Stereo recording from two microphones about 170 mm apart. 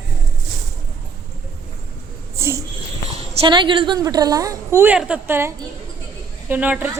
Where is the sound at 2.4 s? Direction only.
15° right (ahead or behind).